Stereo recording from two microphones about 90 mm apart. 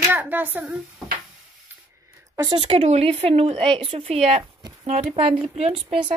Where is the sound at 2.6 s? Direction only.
90° right.